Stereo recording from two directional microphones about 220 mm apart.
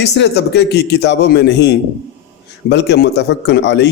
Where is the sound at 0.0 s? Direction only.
50° left (ahead or behind).